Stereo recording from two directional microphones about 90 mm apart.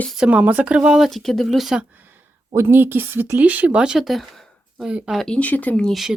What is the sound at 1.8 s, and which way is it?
A woman's voice, 20° right (ahead or behind).